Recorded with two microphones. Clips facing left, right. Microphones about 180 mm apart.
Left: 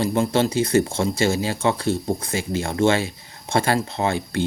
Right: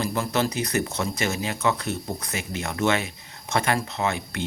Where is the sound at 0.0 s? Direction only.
25° left (ahead or behind).